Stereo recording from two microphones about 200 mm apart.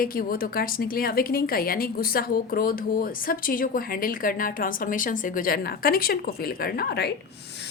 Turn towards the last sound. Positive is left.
turn(degrees=55)  # may be behind; listen again after turning